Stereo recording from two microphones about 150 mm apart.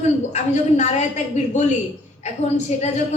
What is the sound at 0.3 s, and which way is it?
A man's voice, 50° left (ahead or behind).